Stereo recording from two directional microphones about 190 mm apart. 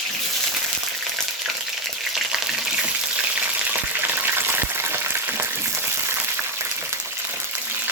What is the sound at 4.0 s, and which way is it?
Frying, 10° right (ahead or behind).